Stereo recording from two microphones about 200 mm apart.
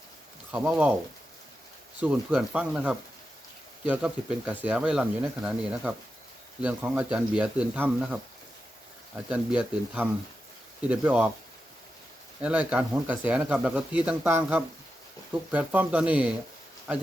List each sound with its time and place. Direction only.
0.5 s speech: 10° right (ahead or behind)
2.0 s speech: 5° right (ahead or behind)
9.3 s speech: 5° right (ahead or behind)
12.4 s speech: 5° right (ahead or behind)